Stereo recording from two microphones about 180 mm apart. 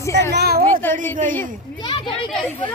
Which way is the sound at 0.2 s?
65° right (ahead or behind).